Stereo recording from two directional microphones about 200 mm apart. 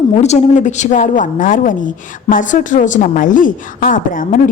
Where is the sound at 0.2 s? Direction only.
35° left (ahead or behind).